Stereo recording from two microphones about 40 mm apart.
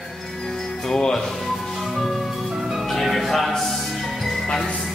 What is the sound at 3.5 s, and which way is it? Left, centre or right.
Music, centre.